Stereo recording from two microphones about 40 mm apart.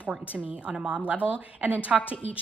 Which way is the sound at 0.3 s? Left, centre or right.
Right.